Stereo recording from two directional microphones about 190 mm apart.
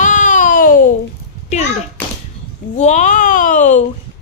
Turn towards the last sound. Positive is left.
turn(degrees=40)  # may be behind; listen again after turning